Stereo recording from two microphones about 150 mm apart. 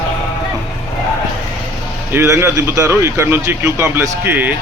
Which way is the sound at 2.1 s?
15° right (ahead or behind).